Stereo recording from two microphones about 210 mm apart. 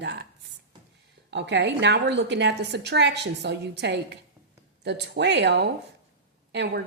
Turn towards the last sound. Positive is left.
turn(degrees=-55)  # may be behind; listen again after turning